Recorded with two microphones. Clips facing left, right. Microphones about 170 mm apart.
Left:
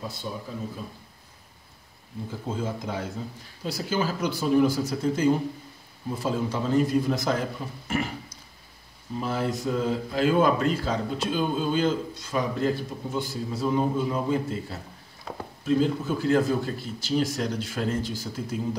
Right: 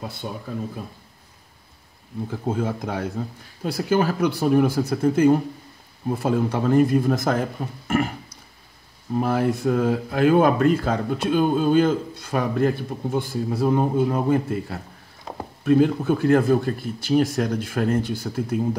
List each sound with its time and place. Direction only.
2.5 s speech: 60° right (ahead or behind)
7.9 s a sound: 55° right (ahead or behind)
9.1 s speech: 55° right (ahead or behind)